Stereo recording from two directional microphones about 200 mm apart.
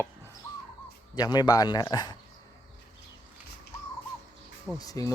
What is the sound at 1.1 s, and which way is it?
A man's voice, 20° left (ahead or behind).